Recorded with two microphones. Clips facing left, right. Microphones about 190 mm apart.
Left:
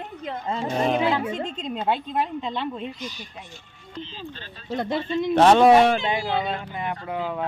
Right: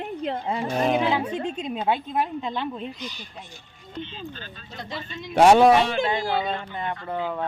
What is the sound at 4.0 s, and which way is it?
Speech, 35° left (ahead or behind).